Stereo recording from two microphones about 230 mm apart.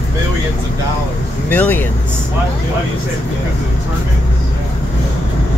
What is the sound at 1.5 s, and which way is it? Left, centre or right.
Speech, centre.